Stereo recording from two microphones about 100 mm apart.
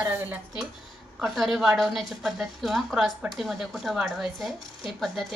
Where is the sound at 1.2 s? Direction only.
Centre (ahead or behind).